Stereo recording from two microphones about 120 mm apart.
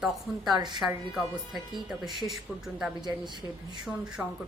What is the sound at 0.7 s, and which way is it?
A woman's voice, centre (ahead or behind).